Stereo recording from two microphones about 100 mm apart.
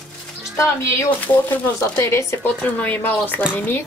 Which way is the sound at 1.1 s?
15° left (ahead or behind).